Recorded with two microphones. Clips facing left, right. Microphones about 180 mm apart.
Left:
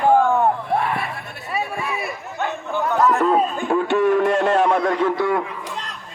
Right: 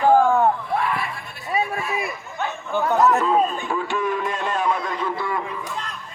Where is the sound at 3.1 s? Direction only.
55° left (ahead or behind); by 5.7 s 70° left (ahead or behind).